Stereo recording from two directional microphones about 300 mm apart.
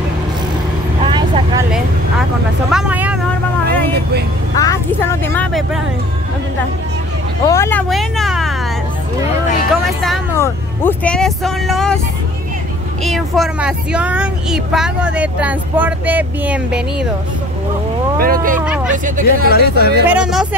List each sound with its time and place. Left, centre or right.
1.1 s vehicle: centre
2.7 s vehicle: centre
3.6 s vehicle: right
4.6 s speech: centre
7.4 s speech: centre
10.0 s speech: centre
13.0 s speech: centre
18.2 s speech: right
19.5 s speech: left
20.1 s speech: centre